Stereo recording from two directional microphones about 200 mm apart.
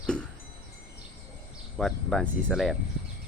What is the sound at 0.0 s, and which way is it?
Music, 5° left (ahead or behind).